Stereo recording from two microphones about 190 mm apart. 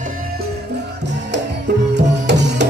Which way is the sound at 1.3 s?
65° right (ahead or behind).